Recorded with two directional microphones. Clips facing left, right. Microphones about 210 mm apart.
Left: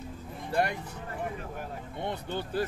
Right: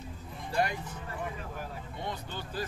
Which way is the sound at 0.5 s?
55° left (ahead or behind).